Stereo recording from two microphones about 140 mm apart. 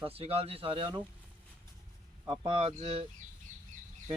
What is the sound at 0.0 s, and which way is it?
Speech, 45° right (ahead or behind).